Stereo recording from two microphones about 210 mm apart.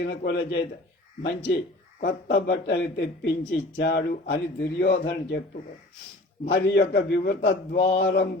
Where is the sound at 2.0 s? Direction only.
50° left (ahead or behind).